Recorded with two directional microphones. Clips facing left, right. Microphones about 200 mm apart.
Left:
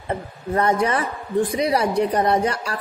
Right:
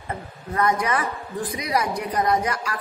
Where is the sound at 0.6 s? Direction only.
30° left (ahead or behind).